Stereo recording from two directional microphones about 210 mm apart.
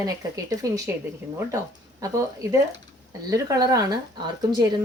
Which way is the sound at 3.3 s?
15° right (ahead or behind).